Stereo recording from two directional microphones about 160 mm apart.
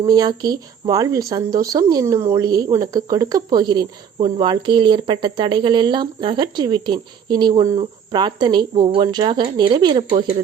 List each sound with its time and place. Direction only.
0.0 s speech: 25° right (ahead or behind)